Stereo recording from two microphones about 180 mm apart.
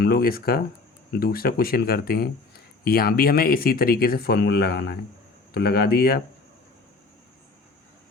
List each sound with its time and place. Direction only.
0.0 s speech: 55° left (ahead or behind)